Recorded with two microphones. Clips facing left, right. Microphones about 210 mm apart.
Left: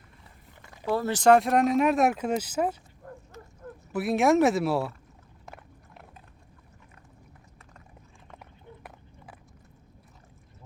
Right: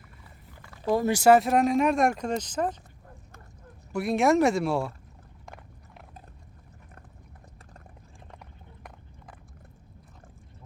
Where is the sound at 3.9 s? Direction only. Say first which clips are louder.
Even; centre (ahead or behind).